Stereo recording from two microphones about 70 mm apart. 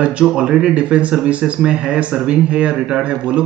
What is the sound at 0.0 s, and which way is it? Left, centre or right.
Speech, centre.